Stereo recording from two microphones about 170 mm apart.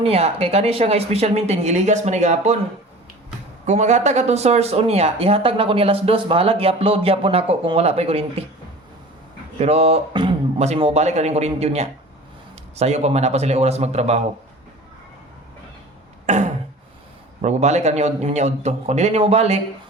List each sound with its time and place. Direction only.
0.0 s speech: 35° right (ahead or behind)
3.7 s speech: 45° right (ahead or behind)
9.6 s speech: 40° right (ahead or behind)
10.6 s speech: 40° right (ahead or behind)
16.2 s throat clearing: 45° right (ahead or behind)
17.4 s speech: 40° right (ahead or behind)